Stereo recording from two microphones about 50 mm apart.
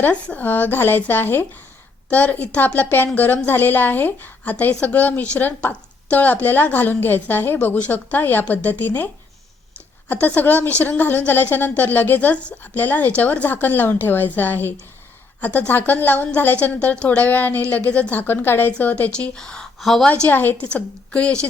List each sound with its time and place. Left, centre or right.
0.0 s a woman's voice: left
0.4 s a woman's voice: left
2.0 s a woman's voice: left
2.6 s a woman's voice: left
10.1 s a woman's voice: left
19.1 s a woman's voice: left
19.8 s a woman's voice: centre
20.3 s a woman's voice: left
20.6 s a woman's voice: left